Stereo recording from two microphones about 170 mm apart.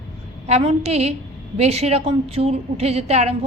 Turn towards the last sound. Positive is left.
turn(degrees=-40)  # may be behind; listen again after turning